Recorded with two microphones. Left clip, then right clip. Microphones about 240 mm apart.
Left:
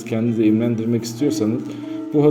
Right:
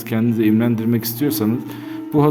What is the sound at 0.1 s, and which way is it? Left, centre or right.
A man's voice, right.